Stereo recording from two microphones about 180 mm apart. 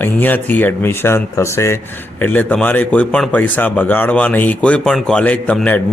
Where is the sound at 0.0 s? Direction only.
10° left (ahead or behind).